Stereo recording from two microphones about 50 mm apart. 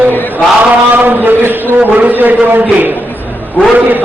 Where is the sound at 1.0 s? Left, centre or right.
Right.